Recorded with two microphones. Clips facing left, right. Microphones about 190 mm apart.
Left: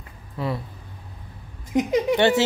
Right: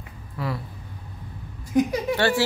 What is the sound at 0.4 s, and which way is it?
Speech, 25° left (ahead or behind).